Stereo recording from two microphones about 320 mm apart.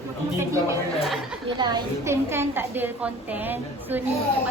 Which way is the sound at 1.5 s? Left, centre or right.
Centre.